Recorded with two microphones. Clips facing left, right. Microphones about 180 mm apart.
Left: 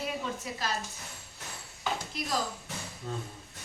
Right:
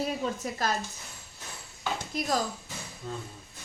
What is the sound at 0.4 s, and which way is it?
Speech, 45° right (ahead or behind).